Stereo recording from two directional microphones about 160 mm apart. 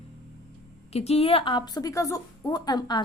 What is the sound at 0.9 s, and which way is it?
A woman's voice, 40° left (ahead or behind).